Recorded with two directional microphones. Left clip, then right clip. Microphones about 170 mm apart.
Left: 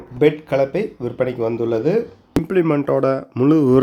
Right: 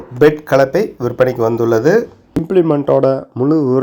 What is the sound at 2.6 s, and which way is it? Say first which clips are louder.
Speech: right 5 dB; 10° left (ahead or behind).